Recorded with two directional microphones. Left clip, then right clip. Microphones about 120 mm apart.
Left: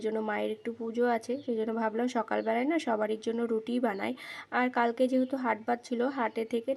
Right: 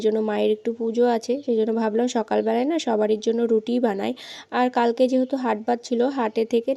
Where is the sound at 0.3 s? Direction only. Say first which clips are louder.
Right 10 dB; 40° right (ahead or behind).